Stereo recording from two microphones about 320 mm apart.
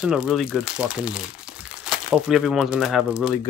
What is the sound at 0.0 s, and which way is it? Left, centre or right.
Speech, centre.